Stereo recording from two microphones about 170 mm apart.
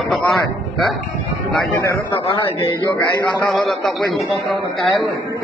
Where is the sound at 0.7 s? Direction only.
Centre (ahead or behind).